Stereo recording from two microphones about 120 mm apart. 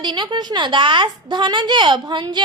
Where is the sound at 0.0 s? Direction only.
40° right (ahead or behind).